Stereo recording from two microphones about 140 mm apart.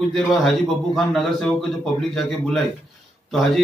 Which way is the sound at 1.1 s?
5° left (ahead or behind).